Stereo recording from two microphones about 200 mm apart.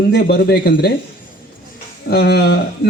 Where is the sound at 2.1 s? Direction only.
55° left (ahead or behind).